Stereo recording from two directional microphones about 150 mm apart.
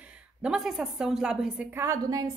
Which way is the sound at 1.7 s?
20° right (ahead or behind).